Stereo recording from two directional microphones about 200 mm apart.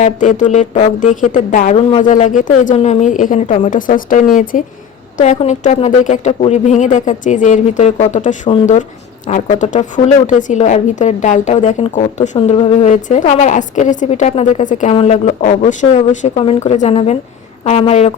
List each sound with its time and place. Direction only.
0.0 s a woman's voice: 40° left (ahead or behind)